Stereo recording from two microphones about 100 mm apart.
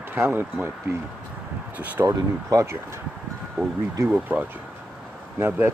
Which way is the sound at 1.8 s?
15° right (ahead or behind).